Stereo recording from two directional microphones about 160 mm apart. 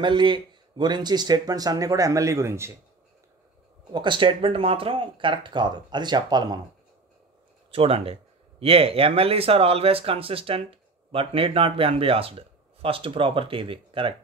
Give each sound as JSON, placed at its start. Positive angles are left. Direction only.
{"t": 0.0, "sound": "speech", "side_deg": -30}
{"t": 3.9, "sound": "speech", "side_deg": -30}
{"t": 7.7, "sound": "speech", "side_deg": -35}